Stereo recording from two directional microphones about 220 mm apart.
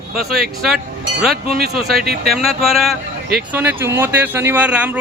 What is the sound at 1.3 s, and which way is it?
Speech, 45° right (ahead or behind).